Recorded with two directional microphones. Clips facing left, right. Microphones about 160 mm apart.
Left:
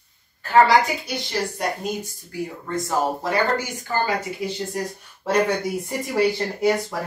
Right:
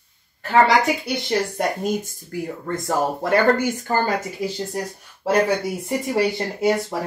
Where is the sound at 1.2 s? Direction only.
50° right (ahead or behind).